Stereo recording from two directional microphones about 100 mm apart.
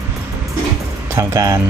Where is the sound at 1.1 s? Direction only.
30° right (ahead or behind).